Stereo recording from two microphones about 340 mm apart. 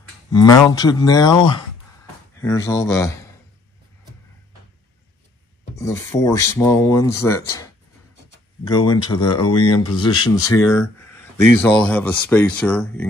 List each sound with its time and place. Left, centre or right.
0.3 s speech: centre
5.8 s speech: centre
8.6 s speech: centre
9.4 s speech: left
9.7 s speech: centre